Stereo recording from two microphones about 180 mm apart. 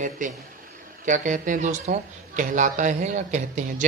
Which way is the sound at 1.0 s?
45° right (ahead or behind).